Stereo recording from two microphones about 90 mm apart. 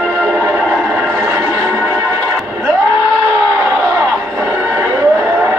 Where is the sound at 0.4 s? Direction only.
25° right (ahead or behind).